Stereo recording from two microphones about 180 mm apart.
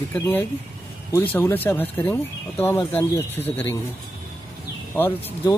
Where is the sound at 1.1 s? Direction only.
15° left (ahead or behind).